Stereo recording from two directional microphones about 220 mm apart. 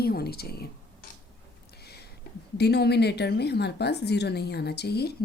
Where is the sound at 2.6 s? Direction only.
50° left (ahead or behind).